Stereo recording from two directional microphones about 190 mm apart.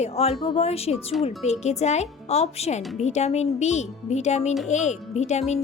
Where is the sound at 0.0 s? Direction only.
35° left (ahead or behind).